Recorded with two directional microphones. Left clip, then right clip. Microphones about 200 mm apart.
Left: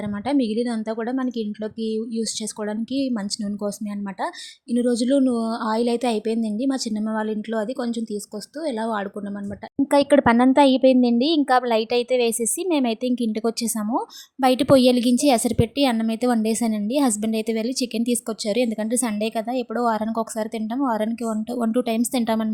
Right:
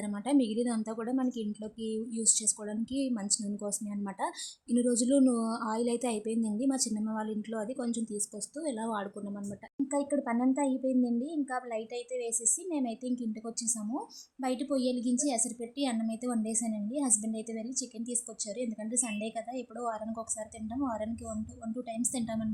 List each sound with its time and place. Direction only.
0.3 s a woman's voice: 20° left (ahead or behind)
4.7 s a woman's voice: 20° left (ahead or behind)
9.9 s a woman's voice: 40° left (ahead or behind)